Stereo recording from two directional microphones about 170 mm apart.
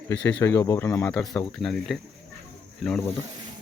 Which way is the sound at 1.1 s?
5° left (ahead or behind).